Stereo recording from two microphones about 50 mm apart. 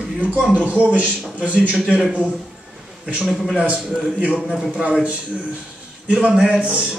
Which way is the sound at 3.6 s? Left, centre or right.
Right.